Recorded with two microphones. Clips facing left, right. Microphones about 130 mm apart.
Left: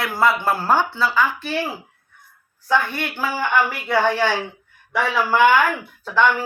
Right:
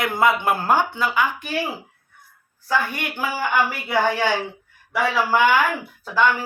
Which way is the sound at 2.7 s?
10° right (ahead or behind).